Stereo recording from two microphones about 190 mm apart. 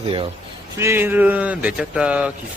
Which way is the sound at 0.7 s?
15° right (ahead or behind).